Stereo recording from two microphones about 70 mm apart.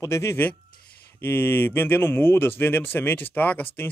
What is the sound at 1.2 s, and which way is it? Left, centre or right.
Speech, left.